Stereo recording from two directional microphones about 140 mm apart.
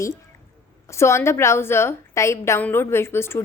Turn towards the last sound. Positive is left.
turn(degrees=15)  # may be behind; listen again after turning